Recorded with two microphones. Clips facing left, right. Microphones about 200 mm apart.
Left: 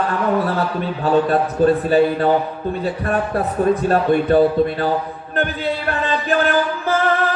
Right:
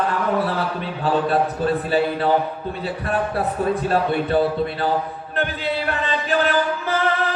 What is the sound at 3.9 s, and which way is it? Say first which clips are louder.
Speech: left 5 dB; 45° left (ahead or behind).